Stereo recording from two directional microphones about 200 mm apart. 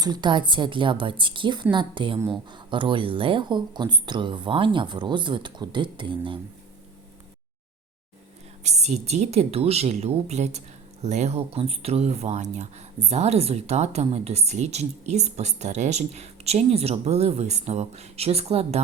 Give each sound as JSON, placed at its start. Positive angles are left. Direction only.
{"t": 0.0, "sound": "speech", "side_deg": -20}
{"t": 8.6, "sound": "speech", "side_deg": -35}